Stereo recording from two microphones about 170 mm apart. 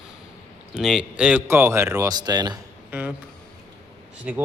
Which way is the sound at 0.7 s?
5° right (ahead or behind).